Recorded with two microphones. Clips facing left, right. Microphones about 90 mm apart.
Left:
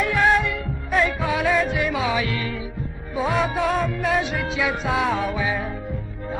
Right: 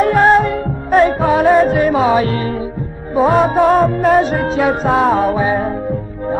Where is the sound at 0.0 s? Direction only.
40° right (ahead or behind).